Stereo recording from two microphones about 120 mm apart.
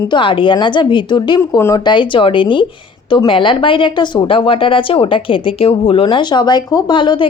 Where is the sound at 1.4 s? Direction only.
25° left (ahead or behind).